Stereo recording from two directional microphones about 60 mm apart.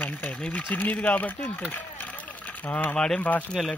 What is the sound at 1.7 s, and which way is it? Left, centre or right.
Run, left.